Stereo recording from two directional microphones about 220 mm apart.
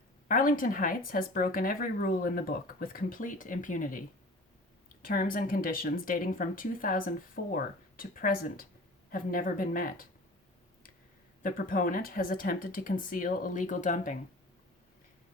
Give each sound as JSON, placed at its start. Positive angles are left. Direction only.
{"t": 0.3, "sound": "speech", "side_deg": 40}
{"t": 5.0, "sound": "speech", "side_deg": 40}
{"t": 11.4, "sound": "speech", "side_deg": 40}